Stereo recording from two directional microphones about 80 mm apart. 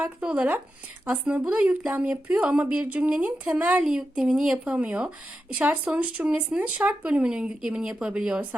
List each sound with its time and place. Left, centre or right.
0.2 s speech: centre